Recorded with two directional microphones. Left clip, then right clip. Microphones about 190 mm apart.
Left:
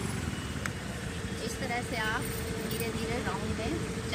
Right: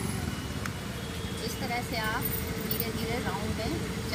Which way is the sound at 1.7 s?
5° right (ahead or behind).